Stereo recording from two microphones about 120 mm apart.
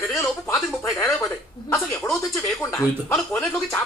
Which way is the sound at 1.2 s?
20° left (ahead or behind).